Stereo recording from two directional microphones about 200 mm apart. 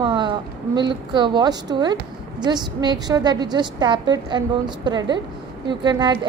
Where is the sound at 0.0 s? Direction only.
25° right (ahead or behind).